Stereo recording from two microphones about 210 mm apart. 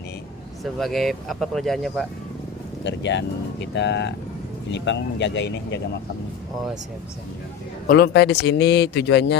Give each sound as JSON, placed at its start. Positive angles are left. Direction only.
{"t": 0.6, "sound": "speech", "side_deg": 0}
{"t": 2.8, "sound": "speech", "side_deg": 60}
{"t": 7.9, "sound": "speech", "side_deg": 50}